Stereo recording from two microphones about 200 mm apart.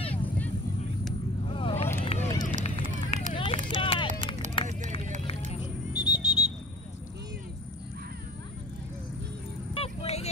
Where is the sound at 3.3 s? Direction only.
25° left (ahead or behind).